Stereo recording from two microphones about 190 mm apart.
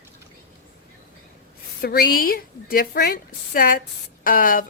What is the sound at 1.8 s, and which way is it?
A woman's voice, 50° left (ahead or behind).